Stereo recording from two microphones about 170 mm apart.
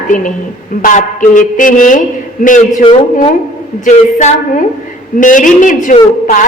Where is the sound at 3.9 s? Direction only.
50° left (ahead or behind).